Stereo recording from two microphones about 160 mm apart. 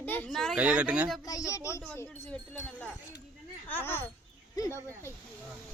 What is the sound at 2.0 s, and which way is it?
Speech, 5° left (ahead or behind).